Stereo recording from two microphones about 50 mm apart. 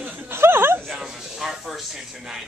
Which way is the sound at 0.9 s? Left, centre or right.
Centre.